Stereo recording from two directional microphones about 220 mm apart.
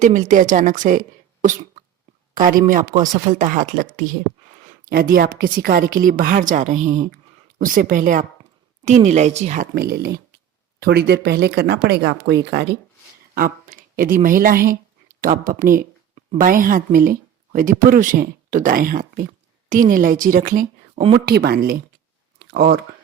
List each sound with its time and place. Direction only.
0.0 s a woman's voice: 35° right (ahead or behind)
21.2 s speech: 45° right (ahead or behind)
22.4 s a sound: 40° right (ahead or behind)